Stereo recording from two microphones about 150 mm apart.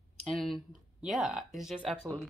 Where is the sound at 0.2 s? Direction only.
5° left (ahead or behind).